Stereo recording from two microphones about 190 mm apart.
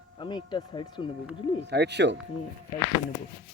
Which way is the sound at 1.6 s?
65° right (ahead or behind).